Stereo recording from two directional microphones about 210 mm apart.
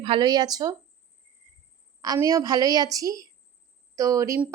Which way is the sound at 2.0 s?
15° right (ahead or behind).